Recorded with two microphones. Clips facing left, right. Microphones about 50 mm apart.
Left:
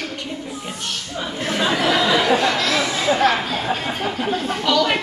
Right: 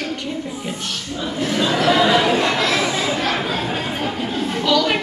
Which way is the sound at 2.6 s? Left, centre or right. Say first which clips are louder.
Right 1 dB; right.